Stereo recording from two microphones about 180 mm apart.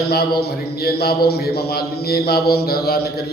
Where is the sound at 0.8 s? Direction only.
60° left (ahead or behind).